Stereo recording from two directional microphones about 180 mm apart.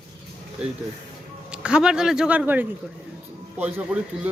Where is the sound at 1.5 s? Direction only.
5° right (ahead or behind).